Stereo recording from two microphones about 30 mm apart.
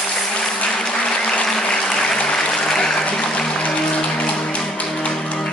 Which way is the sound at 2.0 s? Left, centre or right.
Left.